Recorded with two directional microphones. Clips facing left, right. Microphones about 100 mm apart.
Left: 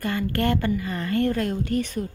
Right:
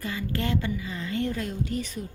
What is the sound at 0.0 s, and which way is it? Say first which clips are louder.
A woman's voice: left 6 dB; 60° left (ahead or behind).